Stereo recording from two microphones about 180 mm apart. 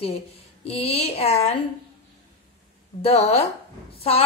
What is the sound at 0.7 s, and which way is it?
Speech, 35° left (ahead or behind).